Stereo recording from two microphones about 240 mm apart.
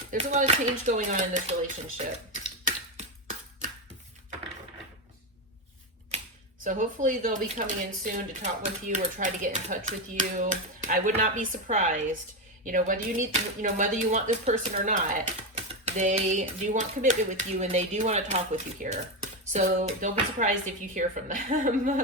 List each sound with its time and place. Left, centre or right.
0.1 s speech: right
6.7 s speech: right